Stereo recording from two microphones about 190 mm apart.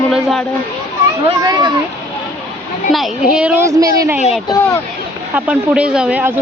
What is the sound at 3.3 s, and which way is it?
Speech, 10° right (ahead or behind).